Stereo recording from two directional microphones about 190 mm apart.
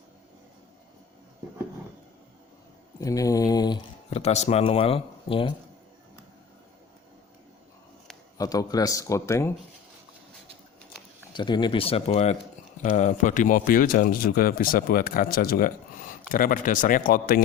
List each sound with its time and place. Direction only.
3.0 s mantra: 20° left (ahead or behind)
4.1 s speech: 35° left (ahead or behind)
8.4 s speech: 20° left (ahead or behind)
11.3 s speech: 25° left (ahead or behind); by 17.4 s 50° left (ahead or behind)